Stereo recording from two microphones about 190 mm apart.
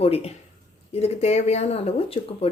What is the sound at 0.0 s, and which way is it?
Speech, 30° left (ahead or behind).